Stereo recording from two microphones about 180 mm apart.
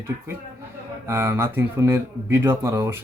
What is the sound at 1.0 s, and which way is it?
Speech, 15° right (ahead or behind).